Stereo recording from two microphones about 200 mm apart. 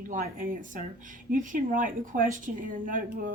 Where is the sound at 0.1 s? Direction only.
45° right (ahead or behind).